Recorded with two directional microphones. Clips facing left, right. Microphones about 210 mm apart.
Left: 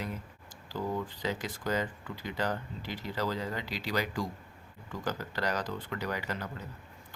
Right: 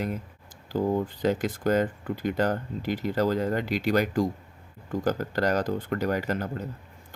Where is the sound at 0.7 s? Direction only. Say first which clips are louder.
Right 9 dB; 45° right (ahead or behind).